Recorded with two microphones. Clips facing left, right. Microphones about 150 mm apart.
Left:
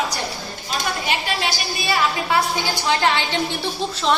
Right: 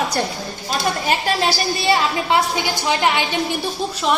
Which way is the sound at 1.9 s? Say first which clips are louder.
Right 2 dB; 25° right (ahead or behind).